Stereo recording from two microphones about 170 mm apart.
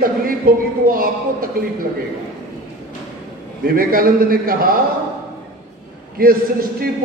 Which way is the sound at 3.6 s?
60° right (ahead or behind).